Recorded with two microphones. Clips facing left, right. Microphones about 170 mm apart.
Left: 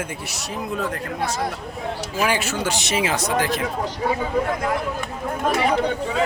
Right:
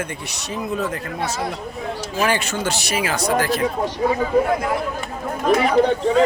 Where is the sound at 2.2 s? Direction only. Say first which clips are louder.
Right 1 dB; 10° left (ahead or behind).